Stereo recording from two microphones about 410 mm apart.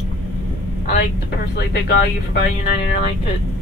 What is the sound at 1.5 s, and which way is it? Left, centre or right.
Speech, left.